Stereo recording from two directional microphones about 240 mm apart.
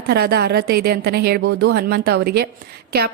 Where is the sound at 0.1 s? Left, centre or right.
Right.